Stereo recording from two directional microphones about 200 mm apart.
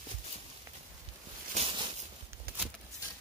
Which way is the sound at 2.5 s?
50° right (ahead or behind).